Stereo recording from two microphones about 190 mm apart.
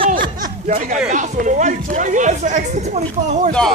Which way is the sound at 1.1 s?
40° right (ahead or behind).